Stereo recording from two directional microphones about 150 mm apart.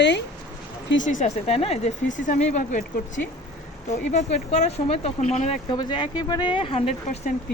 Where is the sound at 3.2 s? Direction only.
90° left.